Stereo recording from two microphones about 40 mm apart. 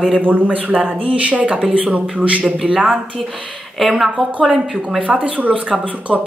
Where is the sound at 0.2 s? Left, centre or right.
Right.